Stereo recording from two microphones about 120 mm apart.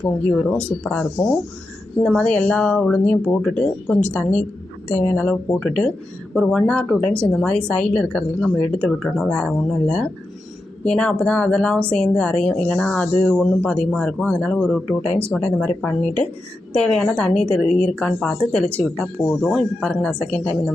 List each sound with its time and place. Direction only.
0.0 s a woman's voice: 10° left (ahead or behind)
2.0 s a woman's voice: 10° left (ahead or behind)